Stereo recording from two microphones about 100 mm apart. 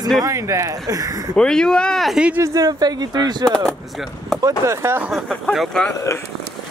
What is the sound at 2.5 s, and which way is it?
Speech, 40° right (ahead or behind).